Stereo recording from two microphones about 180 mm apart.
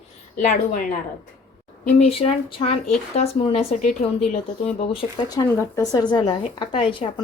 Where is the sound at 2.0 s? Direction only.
30° left (ahead or behind).